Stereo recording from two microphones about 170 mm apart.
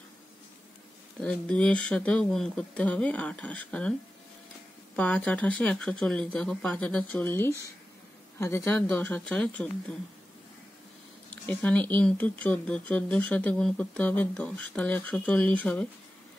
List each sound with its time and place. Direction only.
1.2 s speech: 5° left (ahead or behind)
4.9 s speech: 5° left (ahead or behind)
11.4 s speech: 10° left (ahead or behind)